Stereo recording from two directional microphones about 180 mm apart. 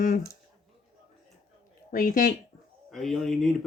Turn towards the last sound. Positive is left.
turn(degrees=0)  # may be behind; listen again after turning